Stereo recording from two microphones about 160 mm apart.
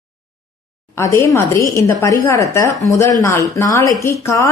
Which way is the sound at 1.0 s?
15° left (ahead or behind).